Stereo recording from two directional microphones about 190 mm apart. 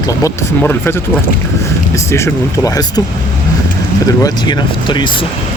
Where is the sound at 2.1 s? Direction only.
15° left (ahead or behind).